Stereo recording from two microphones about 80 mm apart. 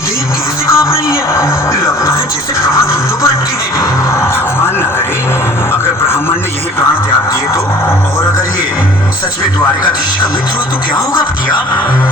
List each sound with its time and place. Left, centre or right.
0.7 s music: left